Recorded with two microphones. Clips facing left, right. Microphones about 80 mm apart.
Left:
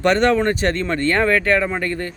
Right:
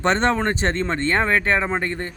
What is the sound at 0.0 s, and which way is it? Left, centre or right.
Speech, right.